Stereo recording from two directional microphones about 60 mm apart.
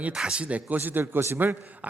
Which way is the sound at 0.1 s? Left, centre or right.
Centre.